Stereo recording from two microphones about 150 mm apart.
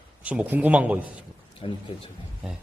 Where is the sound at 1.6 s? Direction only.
40° left (ahead or behind).